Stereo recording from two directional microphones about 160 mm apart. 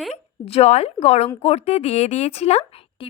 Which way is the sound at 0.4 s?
40° left (ahead or behind).